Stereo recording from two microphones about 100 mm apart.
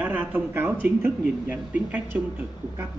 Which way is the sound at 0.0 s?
20° right (ahead or behind).